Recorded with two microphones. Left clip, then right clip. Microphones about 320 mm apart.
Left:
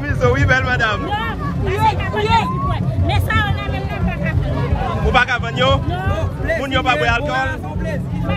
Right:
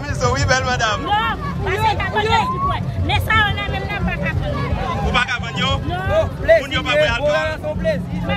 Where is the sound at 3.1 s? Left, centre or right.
Centre.